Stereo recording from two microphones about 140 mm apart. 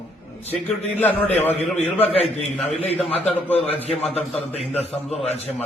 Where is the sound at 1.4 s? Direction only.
10° left (ahead or behind).